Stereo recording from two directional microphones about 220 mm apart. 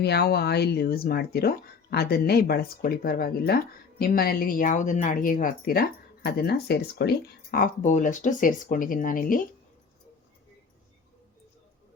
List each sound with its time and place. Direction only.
0.0 s speech: 45° left (ahead or behind)